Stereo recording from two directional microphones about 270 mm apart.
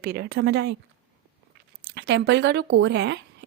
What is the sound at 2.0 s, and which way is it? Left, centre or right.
A woman's voice, right.